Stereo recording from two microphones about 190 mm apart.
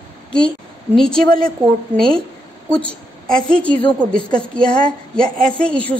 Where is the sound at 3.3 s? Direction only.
5° left (ahead or behind).